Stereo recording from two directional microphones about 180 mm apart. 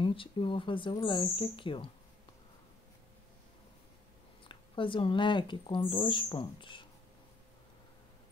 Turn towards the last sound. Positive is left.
turn(degrees=25)  # may be behind; listen again after turning